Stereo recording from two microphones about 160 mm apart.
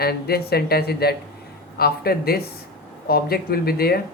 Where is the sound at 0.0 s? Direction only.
75° left (ahead or behind).